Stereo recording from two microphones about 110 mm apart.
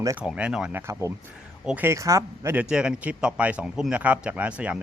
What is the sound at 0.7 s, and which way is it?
Speech, 25° right (ahead or behind).